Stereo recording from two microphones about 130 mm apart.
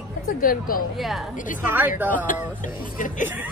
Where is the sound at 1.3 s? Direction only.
90° left.